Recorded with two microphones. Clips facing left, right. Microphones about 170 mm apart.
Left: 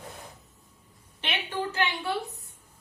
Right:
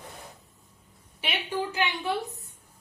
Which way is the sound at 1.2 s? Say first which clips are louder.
Even; 10° right (ahead or behind).